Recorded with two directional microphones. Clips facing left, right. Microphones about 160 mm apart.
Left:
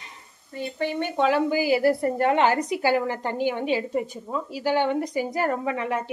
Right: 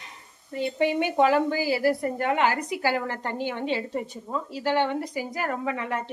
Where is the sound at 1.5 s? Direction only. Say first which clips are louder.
Left 3 dB; 20° left (ahead or behind).